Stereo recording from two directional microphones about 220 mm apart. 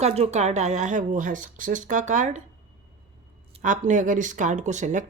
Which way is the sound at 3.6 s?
35° right (ahead or behind).